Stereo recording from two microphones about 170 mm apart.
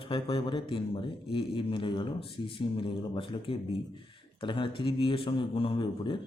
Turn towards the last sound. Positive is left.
turn(degrees=30)  # may be behind; listen again after turning